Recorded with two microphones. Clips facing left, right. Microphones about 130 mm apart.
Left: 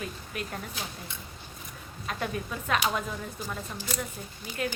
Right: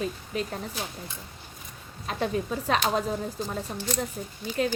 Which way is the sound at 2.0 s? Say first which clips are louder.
Right 5 dB; 35° right (ahead or behind).